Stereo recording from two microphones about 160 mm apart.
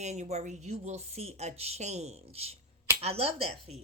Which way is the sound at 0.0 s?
45° right (ahead or behind).